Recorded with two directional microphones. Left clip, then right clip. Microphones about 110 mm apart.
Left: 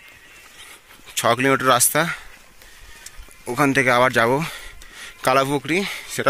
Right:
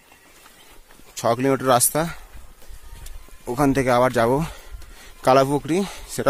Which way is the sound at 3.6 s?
30° right (ahead or behind).